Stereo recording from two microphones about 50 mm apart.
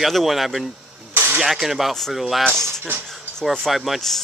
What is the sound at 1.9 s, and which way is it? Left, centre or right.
Speech, centre.